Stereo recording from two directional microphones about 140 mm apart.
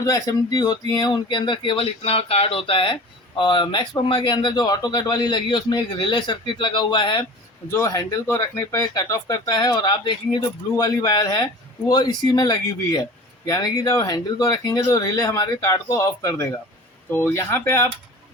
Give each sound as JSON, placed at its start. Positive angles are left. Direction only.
{"t": 0.0, "sound": "speech", "side_deg": 25}
{"t": 7.7, "sound": "speech", "side_deg": 20}